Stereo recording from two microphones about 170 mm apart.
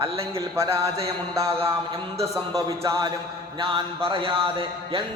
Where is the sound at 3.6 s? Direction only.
30° right (ahead or behind).